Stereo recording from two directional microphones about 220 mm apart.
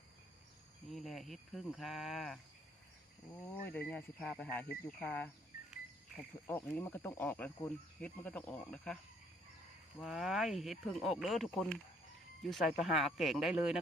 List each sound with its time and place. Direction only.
0.9 s speech: centre (ahead or behind)
3.7 s speech: 5° left (ahead or behind)
4.2 s speech: 5° right (ahead or behind)
4.5 s speech: 10° left (ahead or behind)
6.5 s speech: 10° left (ahead or behind)
10.0 s speech: centre (ahead or behind)